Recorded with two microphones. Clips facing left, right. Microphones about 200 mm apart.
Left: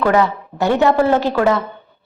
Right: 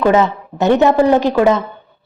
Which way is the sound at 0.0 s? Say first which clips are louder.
Right 2 dB; 20° right (ahead or behind).